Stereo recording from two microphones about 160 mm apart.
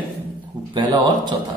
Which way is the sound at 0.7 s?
30° right (ahead or behind).